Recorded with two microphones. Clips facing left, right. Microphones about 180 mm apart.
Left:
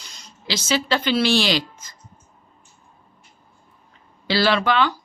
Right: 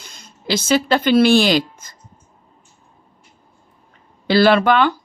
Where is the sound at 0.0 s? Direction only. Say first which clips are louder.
Right 6 dB; 55° right (ahead or behind).